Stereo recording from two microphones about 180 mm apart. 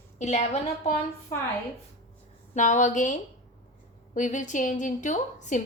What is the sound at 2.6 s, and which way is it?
A woman's voice, 40° left (ahead or behind).